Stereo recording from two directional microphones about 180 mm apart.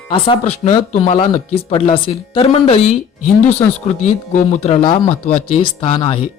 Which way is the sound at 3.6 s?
15° left (ahead or behind).